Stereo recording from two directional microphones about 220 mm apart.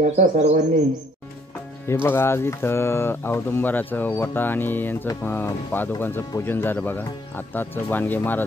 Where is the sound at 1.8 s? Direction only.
10° left (ahead or behind).